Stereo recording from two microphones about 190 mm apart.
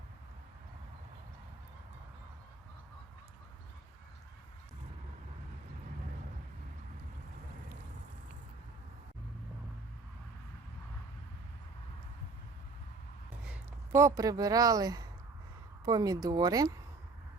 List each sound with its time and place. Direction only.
13.4 s speech: 10° right (ahead or behind)